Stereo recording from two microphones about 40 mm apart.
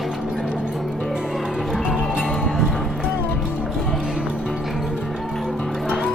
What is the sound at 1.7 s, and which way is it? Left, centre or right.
Music, right.